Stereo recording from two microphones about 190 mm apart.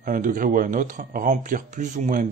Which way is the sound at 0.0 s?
45° right (ahead or behind).